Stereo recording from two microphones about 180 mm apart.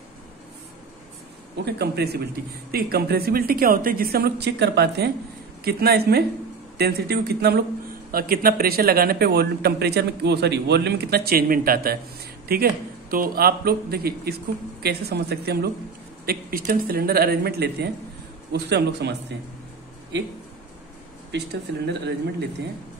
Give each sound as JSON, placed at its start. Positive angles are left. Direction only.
{"t": 1.6, "sound": "a man's voice", "side_deg": -65}
{"t": 21.3, "sound": "speech", "side_deg": -80}